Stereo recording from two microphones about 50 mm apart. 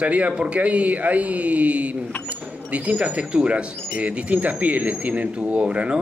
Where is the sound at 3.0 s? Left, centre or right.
Right.